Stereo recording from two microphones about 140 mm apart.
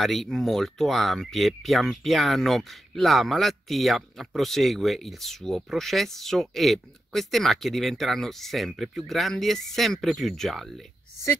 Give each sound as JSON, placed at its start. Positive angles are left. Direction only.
{"t": 0.0, "sound": "speech", "side_deg": 0}